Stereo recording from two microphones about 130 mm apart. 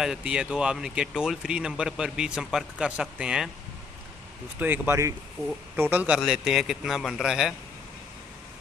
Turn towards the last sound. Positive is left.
turn(degrees=-5)  # may be behind; listen again after turning